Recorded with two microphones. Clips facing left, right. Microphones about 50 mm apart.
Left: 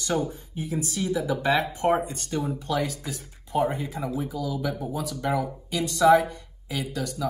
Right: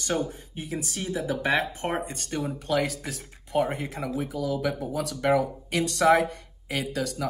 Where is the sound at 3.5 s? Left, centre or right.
Right.